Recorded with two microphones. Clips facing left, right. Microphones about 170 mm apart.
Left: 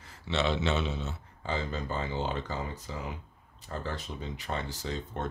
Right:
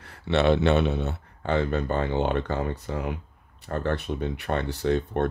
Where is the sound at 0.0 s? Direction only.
65° right (ahead or behind).